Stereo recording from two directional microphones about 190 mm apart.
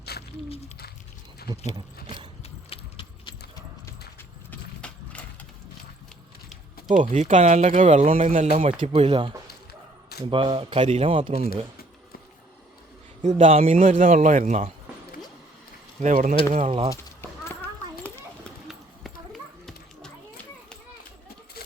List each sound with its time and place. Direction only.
0.1 s a sound: 60° left (ahead or behind)
1.5 s speech: 30° right (ahead or behind)
2.4 s a sound: 30° left (ahead or behind)
4.8 s horse: 5° left (ahead or behind)
6.9 s speech: 40° right (ahead or behind)
13.2 s speech: 35° right (ahead or behind)
16.0 s speech: 45° right (ahead or behind)
16.9 s children playing: 10° left (ahead or behind)